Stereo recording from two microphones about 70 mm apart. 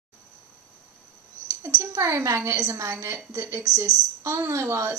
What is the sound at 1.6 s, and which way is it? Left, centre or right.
A woman's voice, right.